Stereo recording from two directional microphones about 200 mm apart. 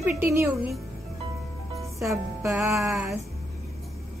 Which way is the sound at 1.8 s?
15° right (ahead or behind).